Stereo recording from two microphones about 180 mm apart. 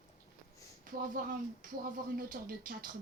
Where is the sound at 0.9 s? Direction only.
50° right (ahead or behind).